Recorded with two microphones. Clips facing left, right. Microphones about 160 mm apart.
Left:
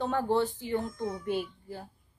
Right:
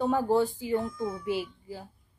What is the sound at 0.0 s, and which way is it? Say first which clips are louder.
A child's voice: right 3 dB; 10° right (ahead or behind).